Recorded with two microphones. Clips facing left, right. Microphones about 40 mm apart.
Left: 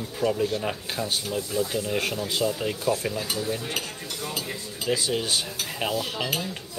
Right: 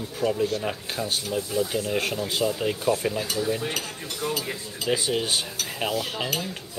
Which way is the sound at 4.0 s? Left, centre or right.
Right.